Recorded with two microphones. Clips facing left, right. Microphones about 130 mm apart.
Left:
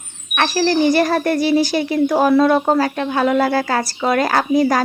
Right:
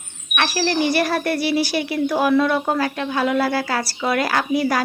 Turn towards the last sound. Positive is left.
turn(degrees=40)  # may be behind; listen again after turning